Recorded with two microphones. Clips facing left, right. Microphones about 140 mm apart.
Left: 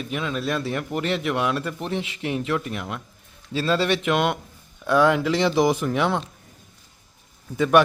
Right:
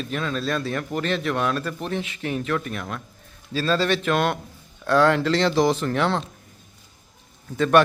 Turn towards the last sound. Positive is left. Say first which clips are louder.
# even
turn(degrees=10)  # may be behind; listen again after turning